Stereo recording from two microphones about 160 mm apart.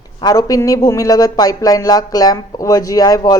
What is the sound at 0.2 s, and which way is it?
Speech, 25° left (ahead or behind).